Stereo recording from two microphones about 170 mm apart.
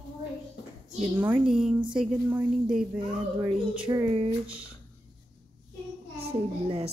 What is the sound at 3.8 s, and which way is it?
Speech, 25° right (ahead or behind).